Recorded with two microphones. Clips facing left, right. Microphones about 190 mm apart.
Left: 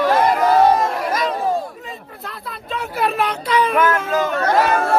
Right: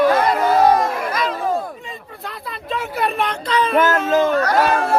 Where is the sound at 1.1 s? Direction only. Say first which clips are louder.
Left 1 dB; 40° left (ahead or behind).